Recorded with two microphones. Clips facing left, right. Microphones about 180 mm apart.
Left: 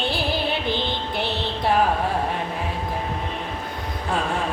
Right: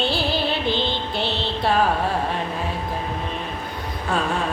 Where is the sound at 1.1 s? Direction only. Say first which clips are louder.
Right 1 dB; 20° left (ahead or behind).